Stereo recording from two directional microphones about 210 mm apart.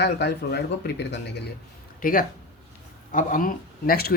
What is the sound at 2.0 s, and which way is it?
Speech, 40° left (ahead or behind).